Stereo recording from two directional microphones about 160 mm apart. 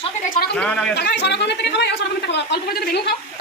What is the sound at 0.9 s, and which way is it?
Speech, 90° left.